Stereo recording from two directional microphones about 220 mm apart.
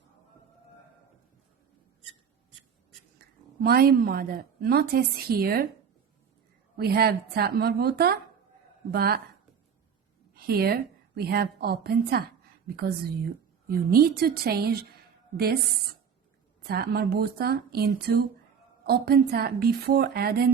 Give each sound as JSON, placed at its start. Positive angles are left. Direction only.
{"t": 3.6, "sound": "a woman's voice", "side_deg": -45}
{"t": 6.7, "sound": "a woman's voice", "side_deg": -45}
{"t": 10.4, "sound": "a woman's voice", "side_deg": -45}
{"t": 16.6, "sound": "a woman's voice", "side_deg": -45}